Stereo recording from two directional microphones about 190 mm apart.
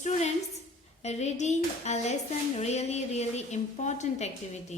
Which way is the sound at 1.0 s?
35° left (ahead or behind).